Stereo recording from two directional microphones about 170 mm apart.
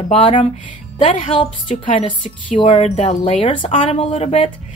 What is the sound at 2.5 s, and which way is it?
A woman's voice, 35° left (ahead or behind).